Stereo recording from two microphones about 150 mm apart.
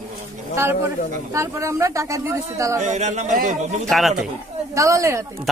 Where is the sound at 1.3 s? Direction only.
20° right (ahead or behind).